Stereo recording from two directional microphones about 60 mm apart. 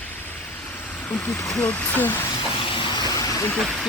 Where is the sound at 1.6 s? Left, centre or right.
Left.